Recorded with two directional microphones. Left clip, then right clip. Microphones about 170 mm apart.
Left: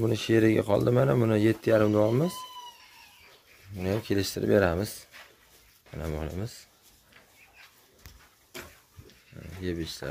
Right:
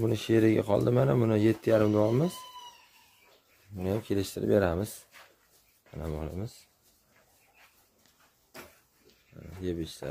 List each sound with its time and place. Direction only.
0.0 s speech: 5° right (ahead or behind)
4.0 s speech: centre (ahead or behind)
9.6 s speech: 5° right (ahead or behind)